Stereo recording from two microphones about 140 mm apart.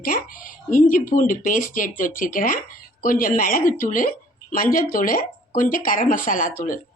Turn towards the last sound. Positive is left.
turn(degrees=75)  # may be behind; listen again after turning